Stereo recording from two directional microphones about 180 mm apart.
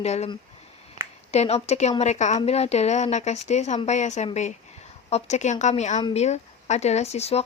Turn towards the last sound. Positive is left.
turn(degrees=35)  # may be behind; listen again after turning